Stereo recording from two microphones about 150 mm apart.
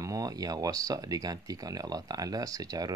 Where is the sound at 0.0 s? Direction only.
25° right (ahead or behind).